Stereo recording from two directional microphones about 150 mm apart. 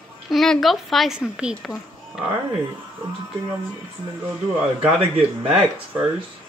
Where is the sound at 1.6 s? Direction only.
5° left (ahead or behind).